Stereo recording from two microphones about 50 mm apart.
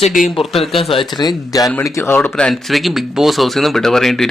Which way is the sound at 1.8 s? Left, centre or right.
Left.